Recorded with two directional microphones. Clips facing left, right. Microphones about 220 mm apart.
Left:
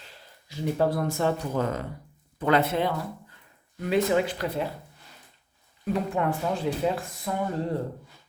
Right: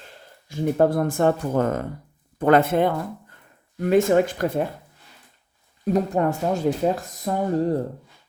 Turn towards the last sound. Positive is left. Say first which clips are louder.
# right 6 dB
turn(degrees=-40)  # may be behind; listen again after turning